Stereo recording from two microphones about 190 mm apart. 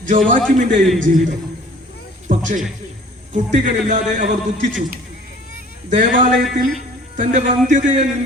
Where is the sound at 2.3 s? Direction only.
45° right (ahead or behind).